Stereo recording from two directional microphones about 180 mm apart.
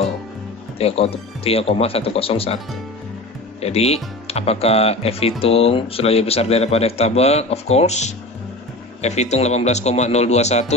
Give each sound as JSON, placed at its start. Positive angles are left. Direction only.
{"t": 0.7, "sound": "a man's voice", "side_deg": 35}
{"t": 3.6, "sound": "a man's voice", "side_deg": 35}